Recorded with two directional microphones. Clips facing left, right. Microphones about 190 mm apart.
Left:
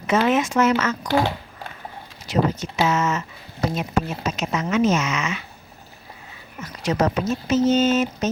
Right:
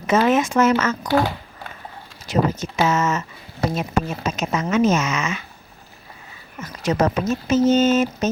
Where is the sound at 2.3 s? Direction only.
45° right (ahead or behind).